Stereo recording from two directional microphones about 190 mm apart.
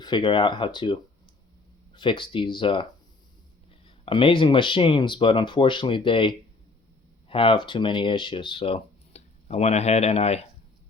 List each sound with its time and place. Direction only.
0.0 s speech: 25° left (ahead or behind)
3.8 s speech: 30° left (ahead or behind)